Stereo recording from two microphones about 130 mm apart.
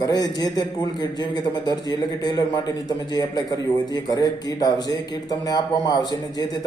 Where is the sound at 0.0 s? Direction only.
30° left (ahead or behind).